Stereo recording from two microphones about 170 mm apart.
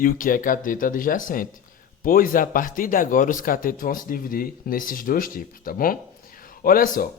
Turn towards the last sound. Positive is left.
turn(degrees=55)  # may be behind; listen again after turning